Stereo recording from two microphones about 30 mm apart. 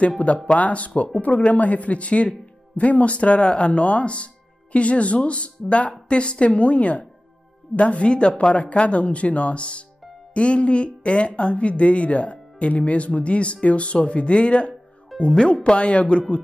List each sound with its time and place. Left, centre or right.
0.2 s speech: left
8.1 s speech: left
8.5 s speech: left